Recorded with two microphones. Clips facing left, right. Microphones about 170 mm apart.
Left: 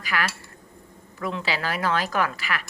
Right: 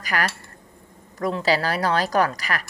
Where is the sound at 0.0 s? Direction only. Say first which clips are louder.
Right 2 dB; 40° right (ahead or behind).